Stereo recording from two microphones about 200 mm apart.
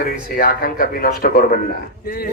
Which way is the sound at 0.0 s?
50° left (ahead or behind).